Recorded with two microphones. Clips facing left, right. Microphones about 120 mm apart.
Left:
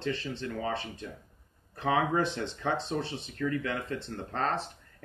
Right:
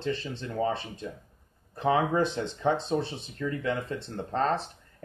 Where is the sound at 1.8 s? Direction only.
30° right (ahead or behind).